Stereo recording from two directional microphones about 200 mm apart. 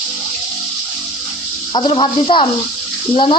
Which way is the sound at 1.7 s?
25° left (ahead or behind).